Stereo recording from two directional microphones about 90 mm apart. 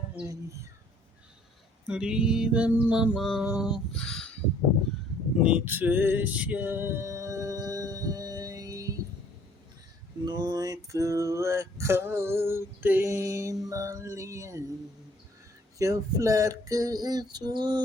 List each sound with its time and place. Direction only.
1.9 s mantra: 10° right (ahead or behind)
3.4 s mantra: 10° right (ahead or behind)
3.9 s a sound: 5° left (ahead or behind)
5.4 s male singing: 15° right (ahead or behind); by 9.0 s 40° right (ahead or behind)
10.2 s male singing: 50° right (ahead or behind); by 14.6 s 35° right (ahead or behind)
15.8 s male singing: 35° right (ahead or behind); by 17.8 s 55° right (ahead or behind)